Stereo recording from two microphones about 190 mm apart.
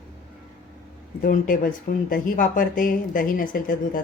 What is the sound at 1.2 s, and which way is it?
Speech, 45° left (ahead or behind).